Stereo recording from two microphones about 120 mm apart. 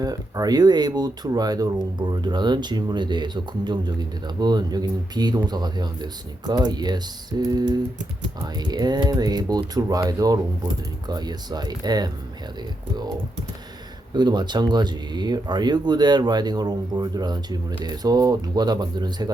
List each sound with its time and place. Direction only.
0.0 s speech: 30° right (ahead or behind)
14.1 s speech: 35° right (ahead or behind)